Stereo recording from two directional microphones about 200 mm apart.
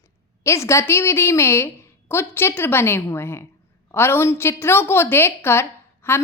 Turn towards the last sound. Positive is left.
turn(degrees=10)  # may be behind; listen again after turning